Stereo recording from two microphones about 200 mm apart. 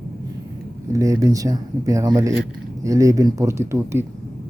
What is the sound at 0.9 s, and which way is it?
Speech, 15° right (ahead or behind).